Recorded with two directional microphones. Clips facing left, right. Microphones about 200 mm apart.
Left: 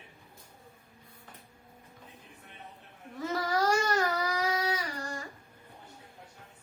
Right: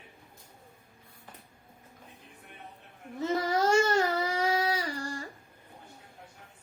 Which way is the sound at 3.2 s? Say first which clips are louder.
Right 2 dB; 25° right (ahead or behind).